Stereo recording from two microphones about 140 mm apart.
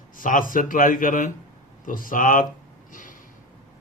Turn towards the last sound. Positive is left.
turn(degrees=70)  # may be behind; listen again after turning